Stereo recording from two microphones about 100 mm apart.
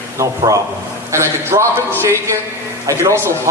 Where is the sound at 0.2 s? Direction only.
35° right (ahead or behind).